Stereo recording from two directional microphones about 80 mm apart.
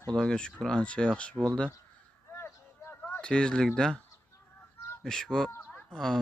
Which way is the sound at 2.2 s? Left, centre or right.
Left.